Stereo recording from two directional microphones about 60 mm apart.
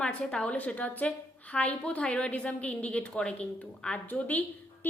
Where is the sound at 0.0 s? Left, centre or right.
Centre.